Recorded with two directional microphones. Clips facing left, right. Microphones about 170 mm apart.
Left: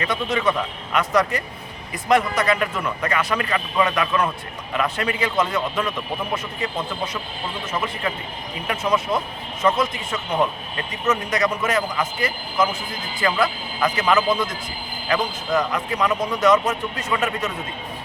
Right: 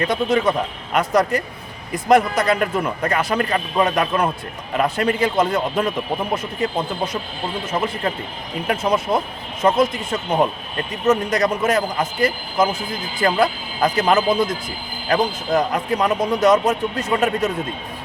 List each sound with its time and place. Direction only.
0.1 s a man's voice: 40° right (ahead or behind)